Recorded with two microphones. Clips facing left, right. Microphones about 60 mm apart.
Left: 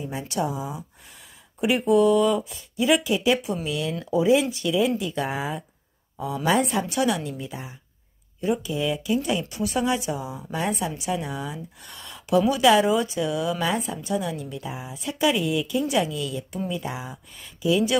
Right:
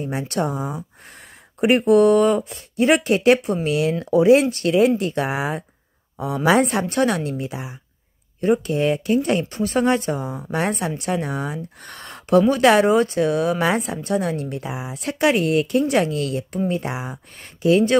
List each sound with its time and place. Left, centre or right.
0.0 s a woman's voice: right
6.9 s a woman's voice: right
8.4 s a woman's voice: right
13.7 s a woman's voice: right